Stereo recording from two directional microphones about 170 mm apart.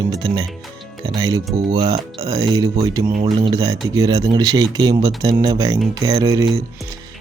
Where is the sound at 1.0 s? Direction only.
20° right (ahead or behind).